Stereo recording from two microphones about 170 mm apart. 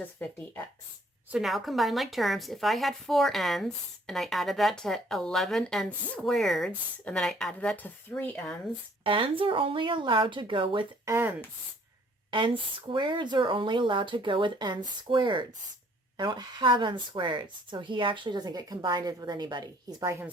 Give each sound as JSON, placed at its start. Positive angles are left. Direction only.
{"t": 1.3, "sound": "a woman's voice", "side_deg": 0}
{"t": 9.0, "sound": "speech", "side_deg": -30}
{"t": 11.0, "sound": "speech", "side_deg": -15}
{"t": 12.3, "sound": "speech", "side_deg": -30}